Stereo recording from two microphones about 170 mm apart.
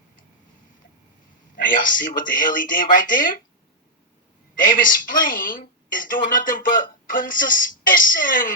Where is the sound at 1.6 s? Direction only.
55° left (ahead or behind).